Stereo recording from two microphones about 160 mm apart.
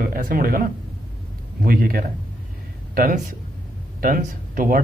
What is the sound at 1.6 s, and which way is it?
Speech, 65° right (ahead or behind).